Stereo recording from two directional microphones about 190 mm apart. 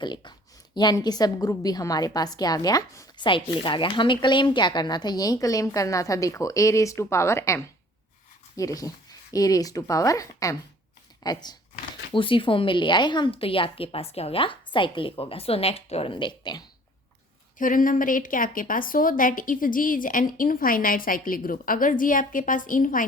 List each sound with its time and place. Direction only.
0.0 s a woman's voice: 25° left (ahead or behind)
17.6 s a woman's voice: 45° left (ahead or behind)